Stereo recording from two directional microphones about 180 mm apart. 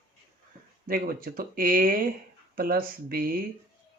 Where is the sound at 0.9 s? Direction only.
55° right (ahead or behind).